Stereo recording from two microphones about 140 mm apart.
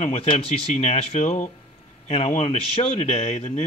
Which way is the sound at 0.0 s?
45° left (ahead or behind).